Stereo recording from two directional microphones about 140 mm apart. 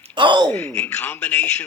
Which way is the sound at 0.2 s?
35° right (ahead or behind).